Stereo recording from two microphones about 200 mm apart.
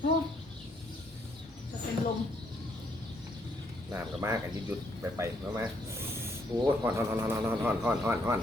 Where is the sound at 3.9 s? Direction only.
10° right (ahead or behind).